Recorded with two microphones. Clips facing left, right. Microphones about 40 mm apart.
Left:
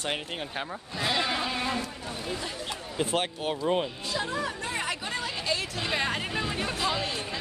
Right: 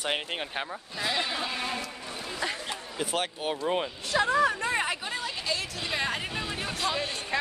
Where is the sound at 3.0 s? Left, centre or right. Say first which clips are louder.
Left 2 dB; centre.